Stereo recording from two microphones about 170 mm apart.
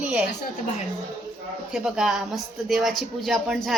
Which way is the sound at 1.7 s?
5° right (ahead or behind).